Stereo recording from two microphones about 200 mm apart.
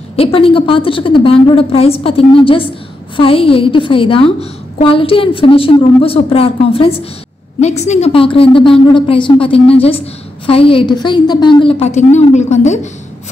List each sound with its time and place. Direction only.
0.1 s a woman's voice: 30° left (ahead or behind)